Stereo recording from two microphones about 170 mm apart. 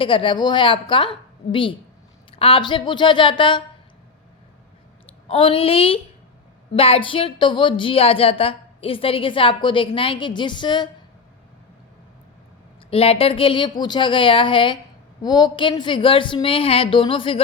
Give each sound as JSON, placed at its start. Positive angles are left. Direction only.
{"t": 0.0, "sound": "a woman's voice", "side_deg": 30}
{"t": 5.3, "sound": "a woman's voice", "side_deg": 35}
{"t": 12.9, "sound": "a woman's voice", "side_deg": 35}